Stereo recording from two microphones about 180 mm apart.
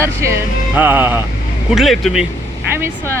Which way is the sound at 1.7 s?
Centre (ahead or behind).